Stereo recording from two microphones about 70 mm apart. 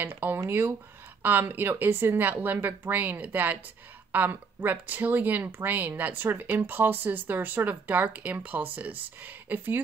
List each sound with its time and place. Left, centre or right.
0.0 s speech: right